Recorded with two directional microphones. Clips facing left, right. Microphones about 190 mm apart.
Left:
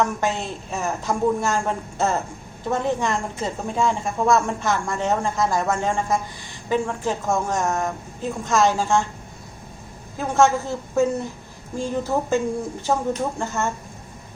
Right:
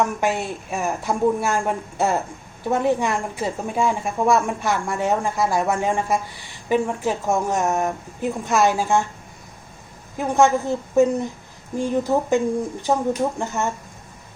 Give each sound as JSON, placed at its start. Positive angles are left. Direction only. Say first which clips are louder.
{"t": 0.0, "sound": "a woman's voice", "louder": "right 1 dB", "side_deg": -15}
{"t": 10.2, "sound": "a woman's voice", "louder": "right 1 dB", "side_deg": -15}
{"t": 13.4, "sound": "a woman's voice", "louder": "right 1 dB", "side_deg": -15}